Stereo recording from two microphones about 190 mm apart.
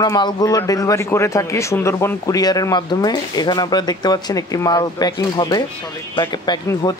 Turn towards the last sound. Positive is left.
turn(degrees=20)  # may be behind; listen again after turning